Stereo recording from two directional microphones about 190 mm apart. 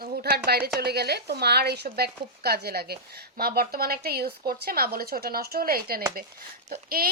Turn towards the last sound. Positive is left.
turn(degrees=-50)  # may be behind; listen again after turning